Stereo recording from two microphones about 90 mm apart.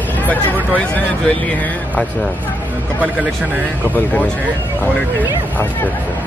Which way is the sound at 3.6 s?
20° left (ahead or behind).